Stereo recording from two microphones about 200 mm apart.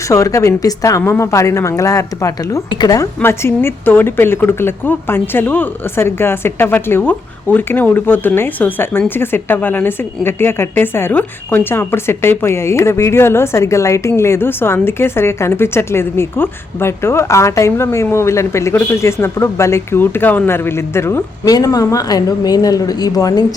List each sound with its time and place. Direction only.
0.1 s a woman's voice: 15° left (ahead or behind)